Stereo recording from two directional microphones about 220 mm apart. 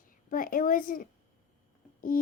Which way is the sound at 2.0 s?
40° left (ahead or behind).